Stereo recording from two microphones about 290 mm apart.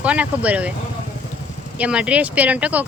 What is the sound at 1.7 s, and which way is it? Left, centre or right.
Speech, centre.